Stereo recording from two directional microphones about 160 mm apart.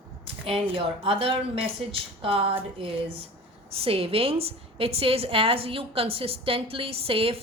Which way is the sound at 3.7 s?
35° right (ahead or behind).